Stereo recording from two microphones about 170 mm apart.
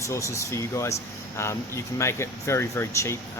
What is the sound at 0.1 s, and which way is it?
Speech, 15° left (ahead or behind).